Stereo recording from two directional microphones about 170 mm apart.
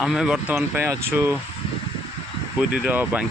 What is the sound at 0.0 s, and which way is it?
Speech, centre (ahead or behind).